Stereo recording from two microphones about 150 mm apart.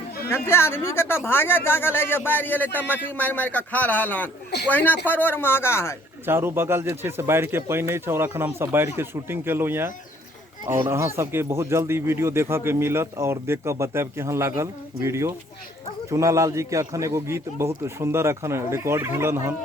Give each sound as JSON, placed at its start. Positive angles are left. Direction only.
{"t": 0.3, "sound": "speech", "side_deg": 15}
{"t": 6.2, "sound": "speech", "side_deg": -15}